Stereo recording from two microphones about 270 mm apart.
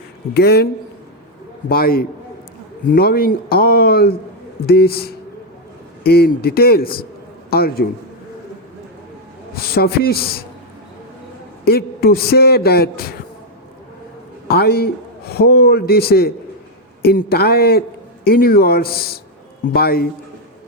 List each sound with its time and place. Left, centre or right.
0.3 s a man's voice: left
1.7 s a man's voice: left
9.6 s a man's voice: left
11.6 s a man's voice: left
14.4 s a man's voice: left